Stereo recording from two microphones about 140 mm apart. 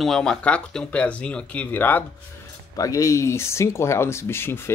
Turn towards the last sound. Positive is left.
turn(degrees=15)  # may be behind; listen again after turning